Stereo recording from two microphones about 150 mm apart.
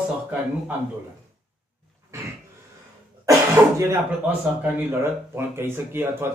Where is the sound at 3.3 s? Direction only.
20° right (ahead or behind).